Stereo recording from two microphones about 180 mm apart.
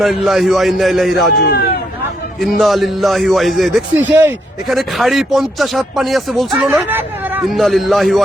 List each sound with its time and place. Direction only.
0.0 s speech: centre (ahead or behind)
1.4 s speech: 60° left (ahead or behind)
2.4 s speech: centre (ahead or behind)
7.5 s speech: centre (ahead or behind)